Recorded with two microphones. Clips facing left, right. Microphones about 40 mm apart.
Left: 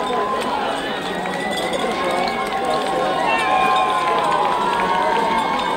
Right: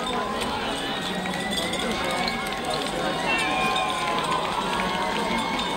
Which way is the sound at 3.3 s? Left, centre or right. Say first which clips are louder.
Left 7 dB; centre.